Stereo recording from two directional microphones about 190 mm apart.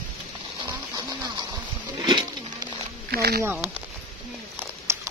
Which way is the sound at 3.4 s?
10° right (ahead or behind).